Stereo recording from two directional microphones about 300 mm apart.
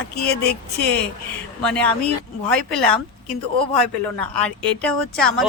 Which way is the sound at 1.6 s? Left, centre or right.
Centre.